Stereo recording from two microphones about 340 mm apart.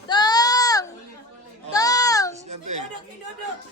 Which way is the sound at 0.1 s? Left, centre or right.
Centre.